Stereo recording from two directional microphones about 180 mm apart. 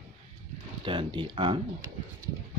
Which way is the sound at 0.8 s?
30° right (ahead or behind).